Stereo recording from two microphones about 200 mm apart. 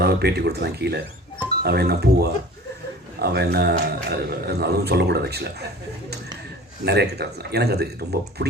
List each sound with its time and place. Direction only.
0.0 s a man's voice: 55° right (ahead or behind)
6.8 s speech: 55° right (ahead or behind)